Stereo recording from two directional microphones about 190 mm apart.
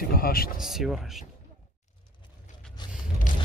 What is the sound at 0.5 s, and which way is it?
Speech, centre (ahead or behind).